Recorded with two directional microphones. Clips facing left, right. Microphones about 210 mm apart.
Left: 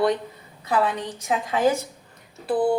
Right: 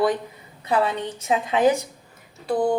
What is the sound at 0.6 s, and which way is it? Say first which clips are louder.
A woman's voice: right 1 dB; 25° right (ahead or behind).